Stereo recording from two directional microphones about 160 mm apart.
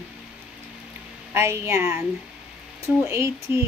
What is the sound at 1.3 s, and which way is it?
Speech, 15° right (ahead or behind).